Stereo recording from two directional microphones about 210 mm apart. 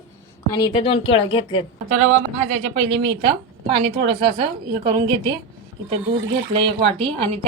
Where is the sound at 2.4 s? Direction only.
30° right (ahead or behind).